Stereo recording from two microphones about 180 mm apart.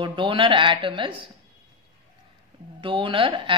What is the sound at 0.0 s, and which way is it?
A woman's voice, 30° right (ahead or behind).